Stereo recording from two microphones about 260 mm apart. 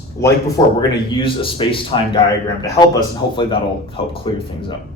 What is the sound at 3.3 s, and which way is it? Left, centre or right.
Speech, centre.